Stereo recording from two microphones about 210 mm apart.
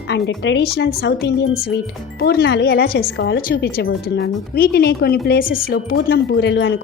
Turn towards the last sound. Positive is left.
turn(degrees=55)  # may be behind; listen again after turning